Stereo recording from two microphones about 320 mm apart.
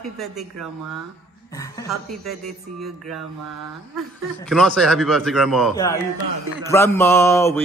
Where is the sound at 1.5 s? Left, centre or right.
Centre.